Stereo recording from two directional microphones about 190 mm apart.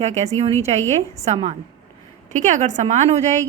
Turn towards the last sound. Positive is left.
turn(degrees=-35)  # may be behind; listen again after turning